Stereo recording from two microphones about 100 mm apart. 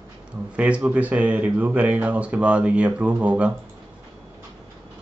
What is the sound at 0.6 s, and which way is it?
Speech, 15° right (ahead or behind).